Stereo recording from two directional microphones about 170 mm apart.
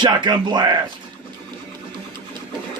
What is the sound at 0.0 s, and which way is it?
Speech, 25° right (ahead or behind).